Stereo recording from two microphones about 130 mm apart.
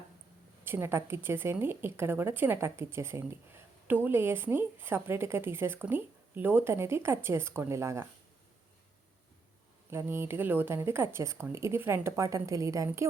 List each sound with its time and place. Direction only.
0.6 s a woman's voice: 20° right (ahead or behind)
9.9 s a woman's voice: 20° right (ahead or behind)